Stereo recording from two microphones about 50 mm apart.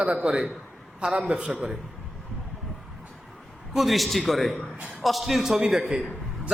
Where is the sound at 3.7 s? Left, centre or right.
Centre.